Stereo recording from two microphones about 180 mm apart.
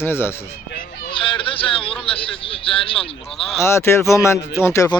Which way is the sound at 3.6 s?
15° left (ahead or behind).